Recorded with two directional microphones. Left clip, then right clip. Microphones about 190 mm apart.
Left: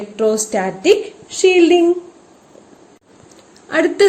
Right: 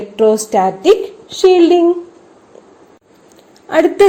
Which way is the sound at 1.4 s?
90° right.